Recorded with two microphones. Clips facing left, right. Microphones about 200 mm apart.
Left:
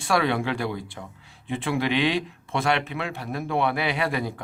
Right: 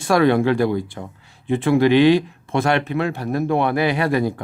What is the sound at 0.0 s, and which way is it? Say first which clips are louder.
Speech: right 8 dB; 45° right (ahead or behind).